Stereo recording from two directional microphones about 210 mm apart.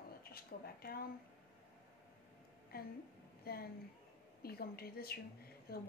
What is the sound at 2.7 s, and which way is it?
A woman's voice, 45° left (ahead or behind).